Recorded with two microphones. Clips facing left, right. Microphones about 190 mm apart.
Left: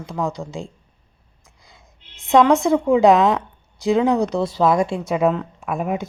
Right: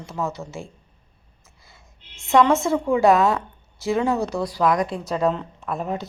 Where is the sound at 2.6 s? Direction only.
15° left (ahead or behind).